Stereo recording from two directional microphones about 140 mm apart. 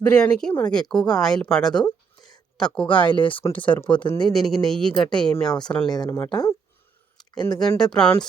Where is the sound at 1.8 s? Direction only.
30° left (ahead or behind).